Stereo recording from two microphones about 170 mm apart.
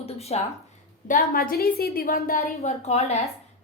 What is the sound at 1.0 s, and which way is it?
A woman's voice, 55° left (ahead or behind).